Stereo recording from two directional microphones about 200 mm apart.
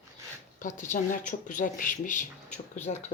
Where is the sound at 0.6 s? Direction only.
40° left (ahead or behind).